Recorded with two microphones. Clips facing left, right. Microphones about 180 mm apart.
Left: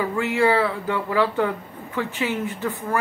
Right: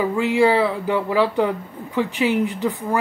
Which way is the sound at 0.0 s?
15° right (ahead or behind).